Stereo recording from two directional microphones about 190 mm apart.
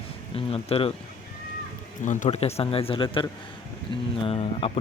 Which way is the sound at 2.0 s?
35° left (ahead or behind).